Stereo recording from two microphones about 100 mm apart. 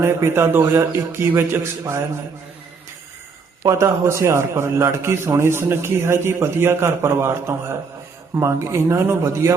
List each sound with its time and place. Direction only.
0.0 s a man's voice: 25° right (ahead or behind)
3.7 s a man's voice: 30° right (ahead or behind)